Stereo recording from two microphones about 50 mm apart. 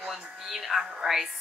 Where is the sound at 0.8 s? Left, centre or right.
Centre.